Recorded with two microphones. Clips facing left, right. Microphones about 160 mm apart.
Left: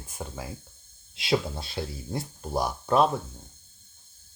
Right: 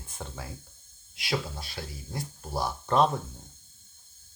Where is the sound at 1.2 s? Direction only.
25° left (ahead or behind).